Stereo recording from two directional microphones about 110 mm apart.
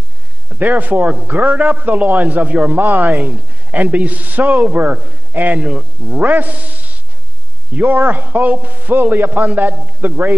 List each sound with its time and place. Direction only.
0.6 s a man's voice: 15° right (ahead or behind)
7.7 s a man's voice: 15° right (ahead or behind)